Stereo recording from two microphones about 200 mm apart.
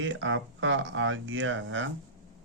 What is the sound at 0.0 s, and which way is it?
Speech, 70° right (ahead or behind).